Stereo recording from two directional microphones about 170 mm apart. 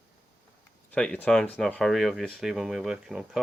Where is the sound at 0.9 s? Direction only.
5° left (ahead or behind).